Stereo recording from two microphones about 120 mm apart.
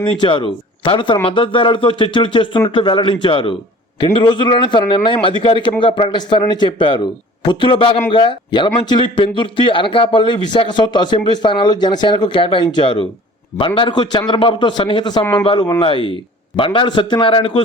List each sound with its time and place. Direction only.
0.0 s a man's voice: 45° left (ahead or behind)
15.2 s speech: 20° left (ahead or behind)
15.8 s speech: 45° left (ahead or behind)